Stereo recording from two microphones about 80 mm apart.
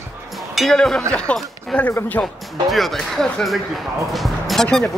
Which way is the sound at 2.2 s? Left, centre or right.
Left.